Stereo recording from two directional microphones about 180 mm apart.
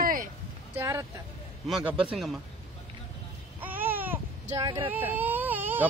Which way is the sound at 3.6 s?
10° right (ahead or behind).